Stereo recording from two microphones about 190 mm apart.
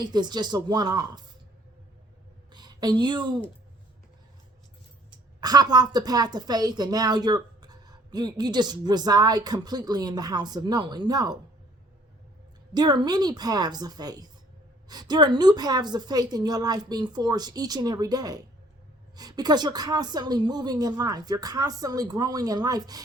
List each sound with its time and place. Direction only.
0.0 s a woman's voice: 20° right (ahead or behind)
2.5 s speech: 20° right (ahead or behind)
5.4 s a woman's voice: 20° right (ahead or behind)
12.7 s a woman's voice: 20° right (ahead or behind)